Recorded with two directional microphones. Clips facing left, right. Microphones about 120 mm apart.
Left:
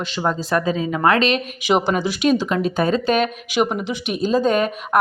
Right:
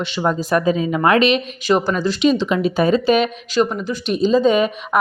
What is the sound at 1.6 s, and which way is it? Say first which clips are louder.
Speech: left 2 dB; 15° left (ahead or behind).